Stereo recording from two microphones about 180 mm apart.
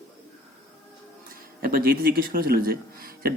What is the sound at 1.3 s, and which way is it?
Speech, 50° right (ahead or behind).